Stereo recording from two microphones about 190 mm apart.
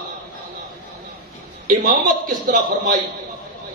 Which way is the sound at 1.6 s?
45° right (ahead or behind).